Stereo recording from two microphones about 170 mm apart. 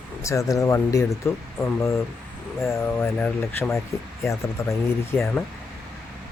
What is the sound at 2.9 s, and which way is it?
Speech, 10° left (ahead or behind).